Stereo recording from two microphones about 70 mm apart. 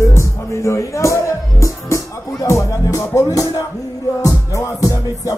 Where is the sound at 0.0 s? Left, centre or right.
Left.